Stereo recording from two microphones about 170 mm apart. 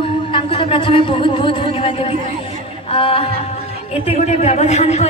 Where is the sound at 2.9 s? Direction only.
35° left (ahead or behind).